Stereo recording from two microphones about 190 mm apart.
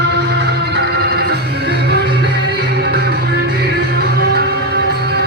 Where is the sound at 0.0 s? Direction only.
65° right (ahead or behind).